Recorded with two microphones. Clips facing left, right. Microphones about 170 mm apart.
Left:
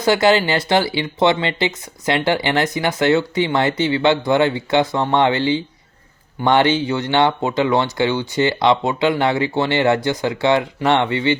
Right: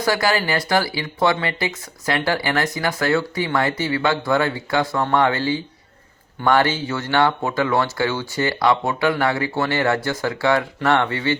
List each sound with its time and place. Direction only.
0.0 s speech: 20° left (ahead or behind)